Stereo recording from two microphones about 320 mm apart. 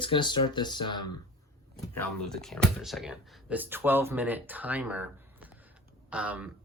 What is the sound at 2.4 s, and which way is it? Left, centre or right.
Speech, centre.